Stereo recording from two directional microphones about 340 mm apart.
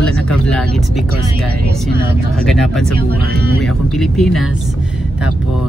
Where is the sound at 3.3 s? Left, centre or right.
Right.